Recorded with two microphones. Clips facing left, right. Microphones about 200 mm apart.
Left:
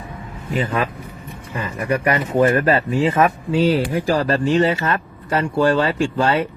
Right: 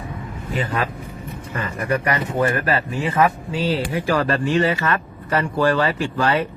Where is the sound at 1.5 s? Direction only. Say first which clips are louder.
Left 1 dB; 15° left (ahead or behind).